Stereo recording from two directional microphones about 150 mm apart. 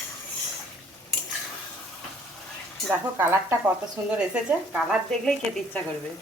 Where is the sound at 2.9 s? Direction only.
15° right (ahead or behind).